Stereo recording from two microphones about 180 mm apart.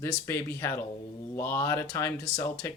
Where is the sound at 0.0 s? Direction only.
15° left (ahead or behind).